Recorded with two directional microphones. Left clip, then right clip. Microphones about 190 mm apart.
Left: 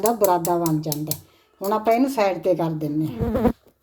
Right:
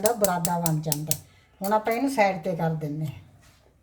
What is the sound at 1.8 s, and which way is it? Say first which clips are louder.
Speech: left 7 dB; 40° left (ahead or behind).